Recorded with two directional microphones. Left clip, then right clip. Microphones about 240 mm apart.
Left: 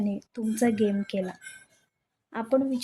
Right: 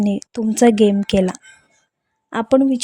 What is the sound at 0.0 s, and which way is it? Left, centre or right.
Speech, right.